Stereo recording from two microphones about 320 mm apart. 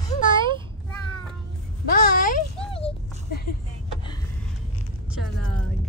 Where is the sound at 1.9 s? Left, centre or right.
Left.